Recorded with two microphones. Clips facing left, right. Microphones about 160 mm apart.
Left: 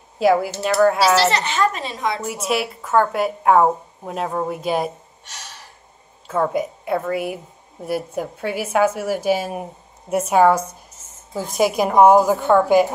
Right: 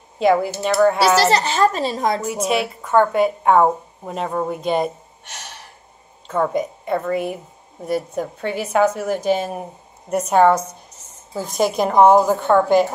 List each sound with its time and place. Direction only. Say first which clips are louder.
0.2 s a woman's voice: even; 5° left (ahead or behind)
1.2 s speech: right 3 dB; 35° right (ahead or behind)
2.2 s a woman's voice: right 2 dB; centre (ahead or behind)
6.2 s a woman's voice: even; 5° left (ahead or behind)